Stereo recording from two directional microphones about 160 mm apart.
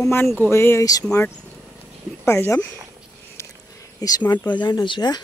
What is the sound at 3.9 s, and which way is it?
A woman's voice, 25° left (ahead or behind).